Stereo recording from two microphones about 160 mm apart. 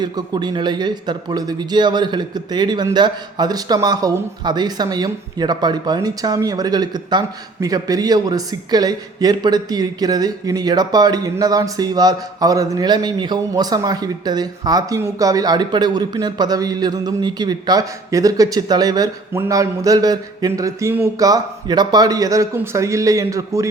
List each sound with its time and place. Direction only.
0.0 s speech: 25° right (ahead or behind)